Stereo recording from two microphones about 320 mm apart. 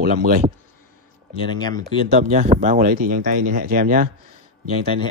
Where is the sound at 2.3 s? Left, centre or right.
Centre.